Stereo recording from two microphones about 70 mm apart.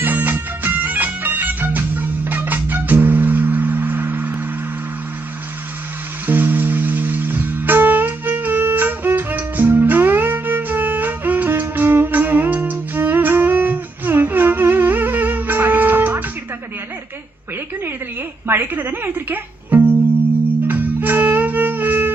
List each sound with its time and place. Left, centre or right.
0.0 s music: right
6.2 s music: right
18.5 s music: right